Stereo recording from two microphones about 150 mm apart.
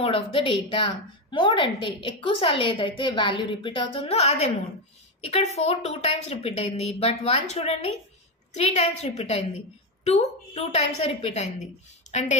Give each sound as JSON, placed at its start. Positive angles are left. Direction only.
{"t": 0.0, "sound": "a woman's voice", "side_deg": 35}